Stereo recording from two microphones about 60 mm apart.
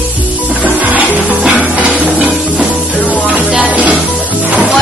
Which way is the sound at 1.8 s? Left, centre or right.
Right.